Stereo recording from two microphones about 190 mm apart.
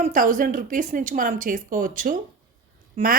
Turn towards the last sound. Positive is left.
turn(degrees=-45)  # may be behind; listen again after turning